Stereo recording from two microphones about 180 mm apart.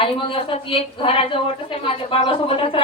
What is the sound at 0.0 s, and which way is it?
A woman's voice, 30° left (ahead or behind).